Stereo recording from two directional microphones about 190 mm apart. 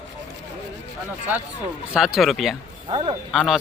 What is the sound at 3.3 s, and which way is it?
Speech, centre (ahead or behind).